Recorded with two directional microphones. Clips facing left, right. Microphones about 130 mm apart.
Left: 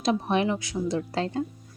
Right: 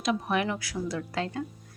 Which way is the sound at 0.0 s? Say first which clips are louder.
Left 3 dB; 30° left (ahead or behind).